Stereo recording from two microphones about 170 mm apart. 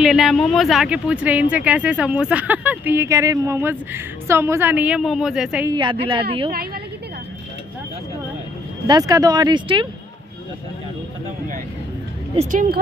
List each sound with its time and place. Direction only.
0.0 s speech: centre (ahead or behind)
5.7 s speech: 25° right (ahead or behind)
8.8 s speech: 20° right (ahead or behind)
12.4 s speech: 50° right (ahead or behind)